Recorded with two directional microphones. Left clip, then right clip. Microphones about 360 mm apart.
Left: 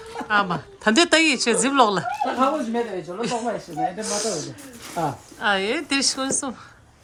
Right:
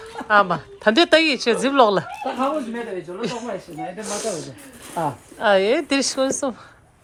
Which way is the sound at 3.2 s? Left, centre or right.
Centre.